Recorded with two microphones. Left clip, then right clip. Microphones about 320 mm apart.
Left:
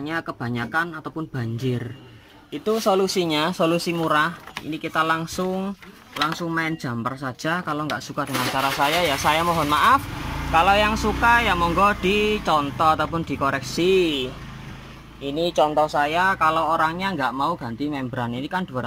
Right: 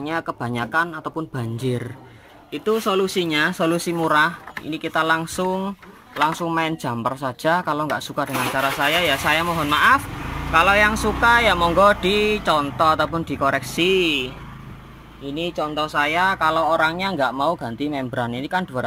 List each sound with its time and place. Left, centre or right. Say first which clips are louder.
0.0 s speech: right 3 dB; centre
15.3 s speech: left 5 dB; left
15.8 s speech: even; centre